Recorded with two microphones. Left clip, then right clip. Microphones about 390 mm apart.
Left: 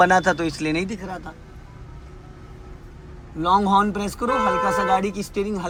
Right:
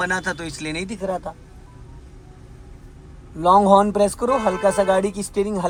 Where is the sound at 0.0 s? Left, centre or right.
Centre.